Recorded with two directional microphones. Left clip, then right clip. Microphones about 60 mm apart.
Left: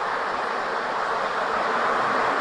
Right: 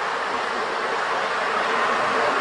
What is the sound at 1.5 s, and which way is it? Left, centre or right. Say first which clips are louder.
Vehicle: right 1 dB; centre.